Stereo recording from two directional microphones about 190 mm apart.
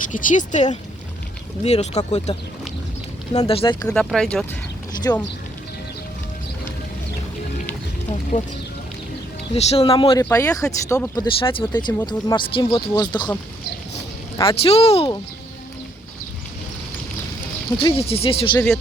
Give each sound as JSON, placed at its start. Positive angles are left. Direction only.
{"t": 0.1, "sound": "speech", "side_deg": 40}
{"t": 3.3, "sound": "speech", "side_deg": 30}
{"t": 3.9, "sound": "speech", "side_deg": 0}
{"t": 5.1, "sound": "speech", "side_deg": 15}
{"t": 8.3, "sound": "speech", "side_deg": 35}
{"t": 9.6, "sound": "speech", "side_deg": 35}
{"t": 10.2, "sound": "speech", "side_deg": 15}
{"t": 14.3, "sound": "speech", "side_deg": 30}
{"t": 17.7, "sound": "speech", "side_deg": 30}
{"t": 18.5, "sound": "speech", "side_deg": 0}